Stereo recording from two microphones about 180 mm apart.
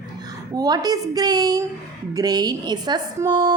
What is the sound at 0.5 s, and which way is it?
A woman's voice, 20° right (ahead or behind).